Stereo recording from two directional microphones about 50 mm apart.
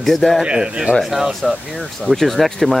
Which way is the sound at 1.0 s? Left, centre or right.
Centre.